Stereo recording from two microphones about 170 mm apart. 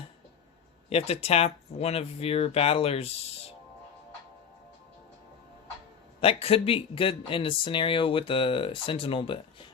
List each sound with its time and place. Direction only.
0.9 s speech: 35° left (ahead or behind)
6.1 s speech: 35° left (ahead or behind)